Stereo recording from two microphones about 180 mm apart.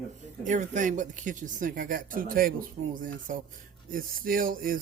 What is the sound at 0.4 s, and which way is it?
Speech, 45° right (ahead or behind).